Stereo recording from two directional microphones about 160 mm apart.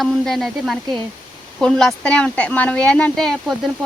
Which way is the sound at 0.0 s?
Centre (ahead or behind).